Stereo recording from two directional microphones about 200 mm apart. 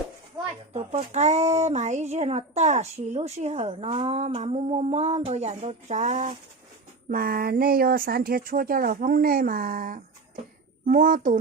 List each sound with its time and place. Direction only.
0.7 s speech: 30° right (ahead or behind)
7.1 s speech: 45° right (ahead or behind)